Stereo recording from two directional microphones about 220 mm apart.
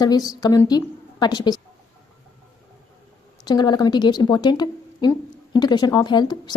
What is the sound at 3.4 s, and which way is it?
Speech, 20° left (ahead or behind).